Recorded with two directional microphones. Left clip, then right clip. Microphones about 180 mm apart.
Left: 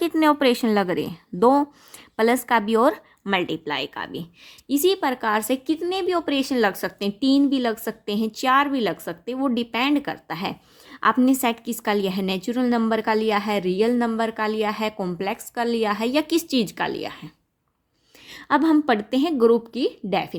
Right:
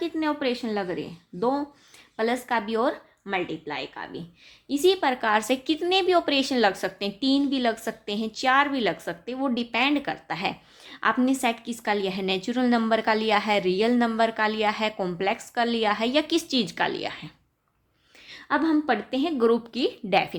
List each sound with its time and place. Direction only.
0.0 s a woman's voice: 50° left (ahead or behind); by 17.3 s 30° left (ahead or behind)
18.3 s speech: 50° left (ahead or behind); by 20.3 s 30° left (ahead or behind)